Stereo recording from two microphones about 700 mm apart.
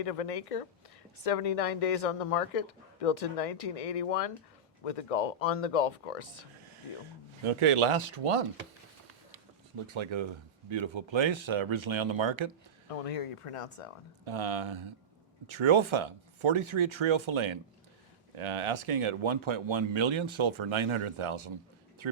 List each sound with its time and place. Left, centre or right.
0.0 s speech: left
7.4 s speech: right
9.3 s a sound: right
10.7 s speech: right
12.9 s speech: left
14.3 s speech: right